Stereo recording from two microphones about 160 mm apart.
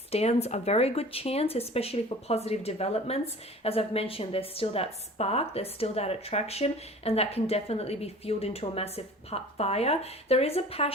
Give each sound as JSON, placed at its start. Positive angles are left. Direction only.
{"t": 0.1, "sound": "a woman's voice", "side_deg": 40}